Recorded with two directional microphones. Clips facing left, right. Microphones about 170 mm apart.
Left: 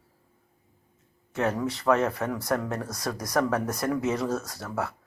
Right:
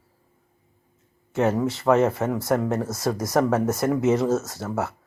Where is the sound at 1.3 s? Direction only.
25° right (ahead or behind).